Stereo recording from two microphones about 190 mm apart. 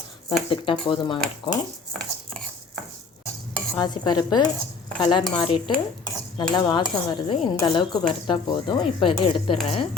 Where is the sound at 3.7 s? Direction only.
20° left (ahead or behind).